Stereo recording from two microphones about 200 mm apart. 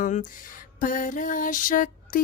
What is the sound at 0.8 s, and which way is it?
Music, 40° left (ahead or behind).